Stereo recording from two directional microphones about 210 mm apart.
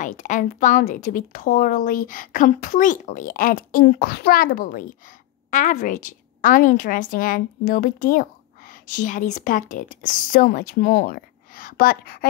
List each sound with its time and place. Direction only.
0.0 s a woman's voice: 35° left (ahead or behind)